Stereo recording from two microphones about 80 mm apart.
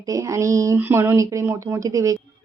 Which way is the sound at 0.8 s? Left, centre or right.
Right.